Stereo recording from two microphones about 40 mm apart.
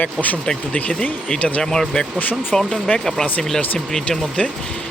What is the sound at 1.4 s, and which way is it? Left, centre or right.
Speech, left.